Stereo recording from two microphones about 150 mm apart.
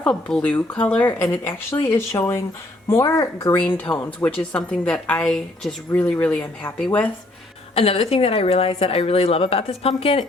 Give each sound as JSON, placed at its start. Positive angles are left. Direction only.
{"t": 0.0, "sound": "a woman's voice", "side_deg": 5}
{"t": 7.8, "sound": "a woman's voice", "side_deg": 40}